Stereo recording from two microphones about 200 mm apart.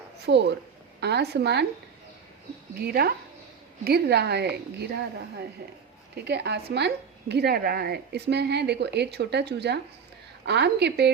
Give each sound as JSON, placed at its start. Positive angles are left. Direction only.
{"t": 0.3, "sound": "a woman's voice", "side_deg": -60}
{"t": 2.7, "sound": "a woman's voice", "side_deg": -50}
{"t": 6.1, "sound": "a woman's voice", "side_deg": -55}